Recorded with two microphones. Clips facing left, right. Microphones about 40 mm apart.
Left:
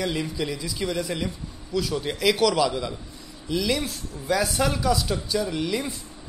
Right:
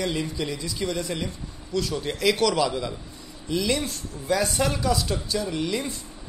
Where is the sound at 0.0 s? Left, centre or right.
Centre.